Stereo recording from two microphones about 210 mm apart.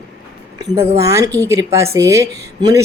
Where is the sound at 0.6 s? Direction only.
15° right (ahead or behind).